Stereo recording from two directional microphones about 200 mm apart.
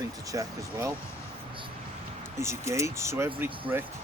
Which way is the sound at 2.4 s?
15° right (ahead or behind).